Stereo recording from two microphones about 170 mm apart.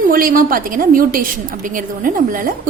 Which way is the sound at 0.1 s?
55° right (ahead or behind).